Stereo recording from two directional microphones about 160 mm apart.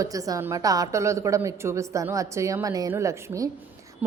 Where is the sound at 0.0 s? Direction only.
20° right (ahead or behind).